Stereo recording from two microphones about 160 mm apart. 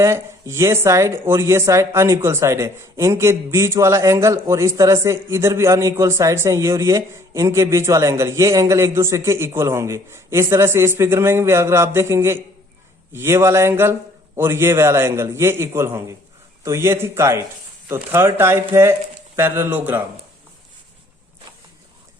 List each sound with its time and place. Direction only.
0.0 s speech: 15° right (ahead or behind)